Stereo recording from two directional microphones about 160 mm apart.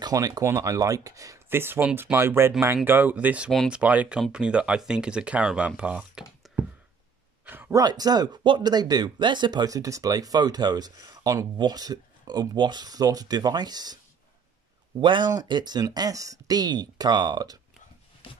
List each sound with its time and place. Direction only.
0.0 s speech: 25° right (ahead or behind); by 6.6 s 5° right (ahead or behind)
7.4 s a sound: 10° right (ahead or behind)
7.8 s speech: 25° right (ahead or behind)
15.0 s speech: 30° right (ahead or behind)